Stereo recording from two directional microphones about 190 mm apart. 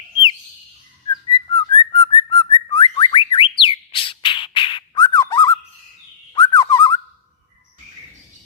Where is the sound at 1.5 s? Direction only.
25° left (ahead or behind).